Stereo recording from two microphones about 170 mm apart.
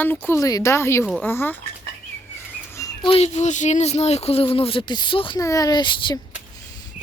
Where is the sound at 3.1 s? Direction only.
40° left (ahead or behind).